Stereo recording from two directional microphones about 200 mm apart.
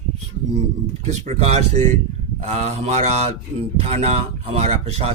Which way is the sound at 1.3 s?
30° right (ahead or behind).